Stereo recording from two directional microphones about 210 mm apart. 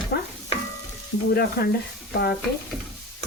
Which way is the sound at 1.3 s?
50° left (ahead or behind).